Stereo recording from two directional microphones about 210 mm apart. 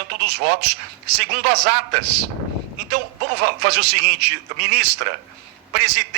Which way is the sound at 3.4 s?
50° right (ahead or behind).